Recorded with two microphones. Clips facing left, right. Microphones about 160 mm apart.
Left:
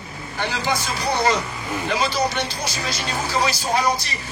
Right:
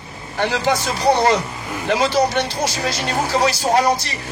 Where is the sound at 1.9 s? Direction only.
65° right (ahead or behind).